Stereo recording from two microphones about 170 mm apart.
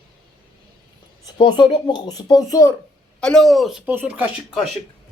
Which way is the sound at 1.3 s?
25° left (ahead or behind).